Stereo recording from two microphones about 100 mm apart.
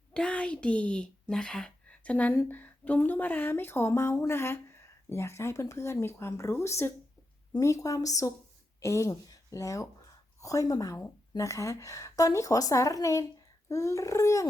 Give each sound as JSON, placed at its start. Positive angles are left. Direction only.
{"t": 0.1, "sound": "a woman's voice", "side_deg": 10}